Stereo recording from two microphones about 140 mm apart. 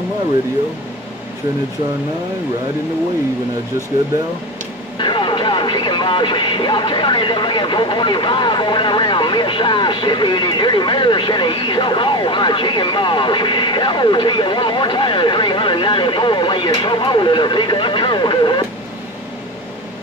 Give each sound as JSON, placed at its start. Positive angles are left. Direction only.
{"t": 4.9, "sound": "speech", "side_deg": 35}